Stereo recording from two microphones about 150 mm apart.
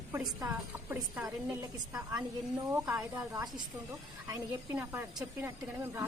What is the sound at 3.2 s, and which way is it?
A woman's voice, 25° right (ahead or behind).